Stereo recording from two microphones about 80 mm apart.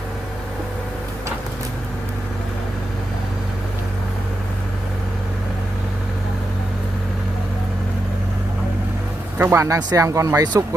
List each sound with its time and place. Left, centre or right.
9.4 s speech: right
9.9 s speech: right